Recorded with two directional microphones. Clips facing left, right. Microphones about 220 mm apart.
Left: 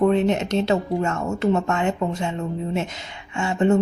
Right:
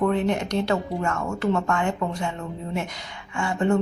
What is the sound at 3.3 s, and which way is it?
Speech, 25° left (ahead or behind).